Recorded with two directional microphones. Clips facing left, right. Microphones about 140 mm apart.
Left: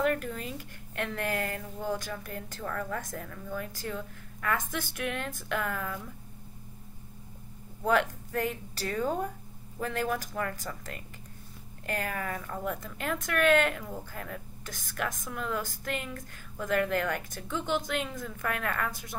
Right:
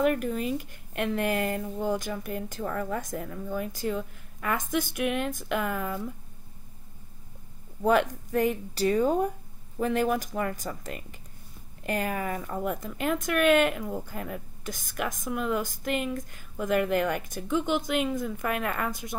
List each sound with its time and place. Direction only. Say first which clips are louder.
0.0 s speech: right 4 dB; 15° right (ahead or behind)
7.8 s speech: right 4 dB; 20° right (ahead or behind)